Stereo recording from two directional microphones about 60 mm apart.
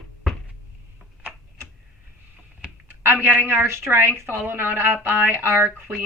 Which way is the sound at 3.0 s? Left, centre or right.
Right.